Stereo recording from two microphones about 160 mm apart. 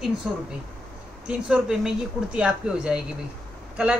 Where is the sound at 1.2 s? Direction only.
5° right (ahead or behind).